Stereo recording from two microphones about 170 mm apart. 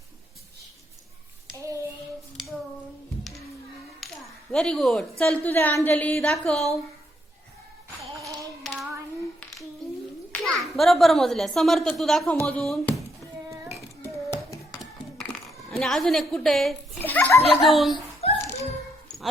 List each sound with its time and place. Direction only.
1.5 s child singing: 20° right (ahead or behind)
4.0 s music: centre (ahead or behind)
4.5 s a woman's voice: 5° left (ahead or behind)
8.6 s hands: centre (ahead or behind)
10.4 s a child's voice: centre (ahead or behind)
14.0 s a sound: 15° left (ahead or behind)
15.7 s a child's voice: centre (ahead or behind)
17.9 s a sound: 35° left (ahead or behind)